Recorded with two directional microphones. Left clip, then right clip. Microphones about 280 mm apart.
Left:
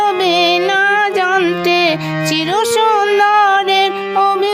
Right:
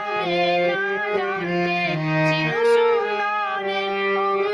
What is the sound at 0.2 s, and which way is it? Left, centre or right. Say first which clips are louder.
Music: left 8 dB; left.